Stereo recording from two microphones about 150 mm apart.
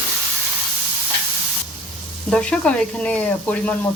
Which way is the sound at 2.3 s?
5° left (ahead or behind).